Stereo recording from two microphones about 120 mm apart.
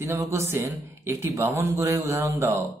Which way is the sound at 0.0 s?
20° right (ahead or behind).